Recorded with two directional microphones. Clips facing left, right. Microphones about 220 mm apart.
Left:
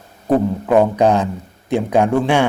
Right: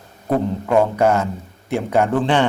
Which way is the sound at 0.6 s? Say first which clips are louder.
Left 2 dB; 15° left (ahead or behind).